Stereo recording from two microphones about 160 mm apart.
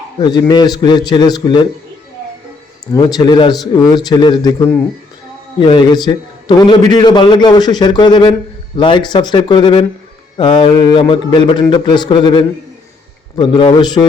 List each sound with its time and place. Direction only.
0.2 s a man's voice: 25° left (ahead or behind)
2.9 s a man's voice: 25° left (ahead or behind)
5.5 s a man's voice: 30° left (ahead or behind)